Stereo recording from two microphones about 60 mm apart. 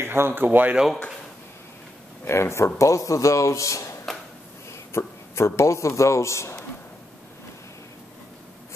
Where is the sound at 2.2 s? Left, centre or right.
Left.